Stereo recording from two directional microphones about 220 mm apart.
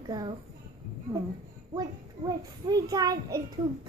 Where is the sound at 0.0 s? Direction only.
20° right (ahead or behind).